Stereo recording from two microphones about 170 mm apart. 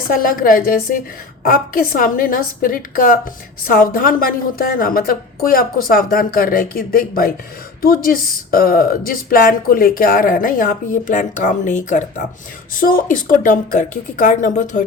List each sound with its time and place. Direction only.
0.1 s a woman's voice: 55° left (ahead or behind)